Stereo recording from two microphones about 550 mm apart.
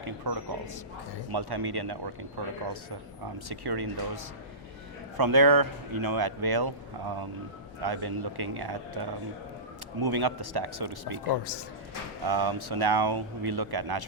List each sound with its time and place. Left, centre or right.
0.0 s a man's voice: right
3.3 s a man's voice: right
11.3 s speech: left
12.3 s speech: right